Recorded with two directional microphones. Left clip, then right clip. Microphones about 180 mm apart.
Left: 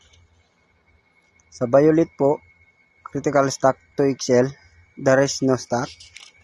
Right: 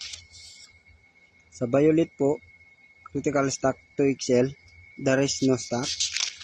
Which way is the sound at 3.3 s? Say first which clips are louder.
Left 7 dB; 35° left (ahead or behind).